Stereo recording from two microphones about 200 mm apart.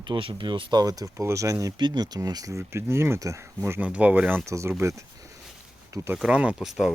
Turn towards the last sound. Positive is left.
turn(degrees=0)  # may be behind; listen again after turning